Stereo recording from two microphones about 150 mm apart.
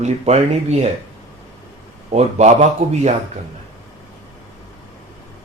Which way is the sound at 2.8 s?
45° right (ahead or behind).